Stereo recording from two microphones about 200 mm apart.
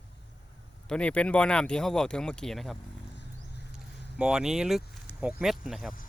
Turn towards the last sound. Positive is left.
turn(degrees=0)  # may be behind; listen again after turning